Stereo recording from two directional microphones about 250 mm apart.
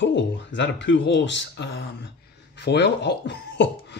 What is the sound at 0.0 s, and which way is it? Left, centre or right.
Speech, left.